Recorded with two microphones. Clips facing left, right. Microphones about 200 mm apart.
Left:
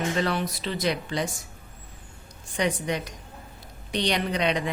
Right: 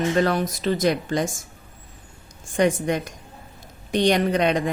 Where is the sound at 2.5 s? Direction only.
50° right (ahead or behind).